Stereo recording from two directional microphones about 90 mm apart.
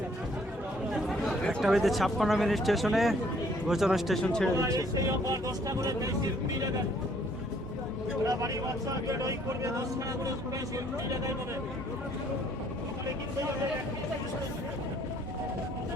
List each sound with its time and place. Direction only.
1.0 s speech: 5° left (ahead or behind)
4.5 s speech: 40° right (ahead or behind)
8.3 s speech: 35° right (ahead or behind)